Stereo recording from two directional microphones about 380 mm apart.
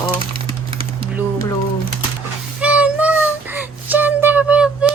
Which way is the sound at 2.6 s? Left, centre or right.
Centre.